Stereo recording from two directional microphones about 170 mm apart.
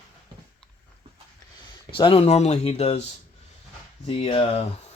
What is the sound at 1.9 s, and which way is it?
Speech, 35° left (ahead or behind).